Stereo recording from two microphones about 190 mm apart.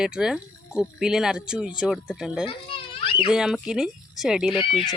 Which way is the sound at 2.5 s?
30° left (ahead or behind).